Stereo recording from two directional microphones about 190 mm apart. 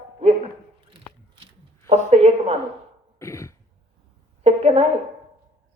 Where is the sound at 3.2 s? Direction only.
15° left (ahead or behind).